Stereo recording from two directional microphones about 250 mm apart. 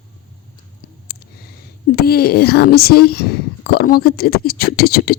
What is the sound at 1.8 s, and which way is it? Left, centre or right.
Speech, left.